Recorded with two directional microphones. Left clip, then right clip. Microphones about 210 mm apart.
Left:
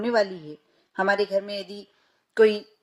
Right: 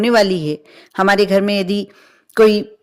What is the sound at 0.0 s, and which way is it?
A woman's voice, 40° right (ahead or behind).